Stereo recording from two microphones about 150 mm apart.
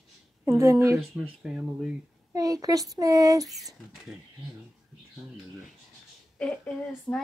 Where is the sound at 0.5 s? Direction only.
20° right (ahead or behind).